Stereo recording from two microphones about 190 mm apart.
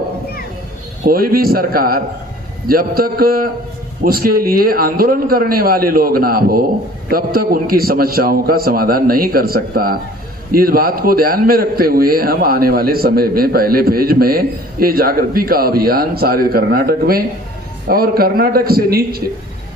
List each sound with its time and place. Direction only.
1.0 s a man's voice: 50° right (ahead or behind)